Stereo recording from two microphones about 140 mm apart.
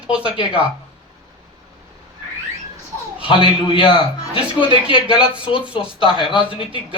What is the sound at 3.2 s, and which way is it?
Speech, 40° left (ahead or behind).